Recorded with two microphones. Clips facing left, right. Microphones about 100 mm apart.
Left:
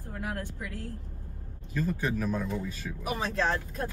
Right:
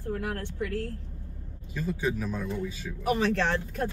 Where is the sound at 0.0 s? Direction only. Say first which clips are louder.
Right 4 dB; 60° right (ahead or behind).